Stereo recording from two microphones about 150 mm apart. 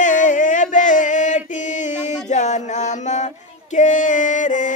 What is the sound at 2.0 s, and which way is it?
Mantra, 55° left (ahead or behind).